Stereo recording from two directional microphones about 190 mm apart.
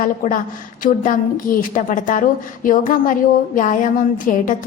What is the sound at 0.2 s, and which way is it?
A woman's voice, 45° left (ahead or behind).